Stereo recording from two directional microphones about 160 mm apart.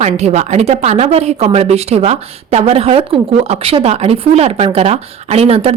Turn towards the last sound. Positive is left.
turn(degrees=-35)  # may be behind; listen again after turning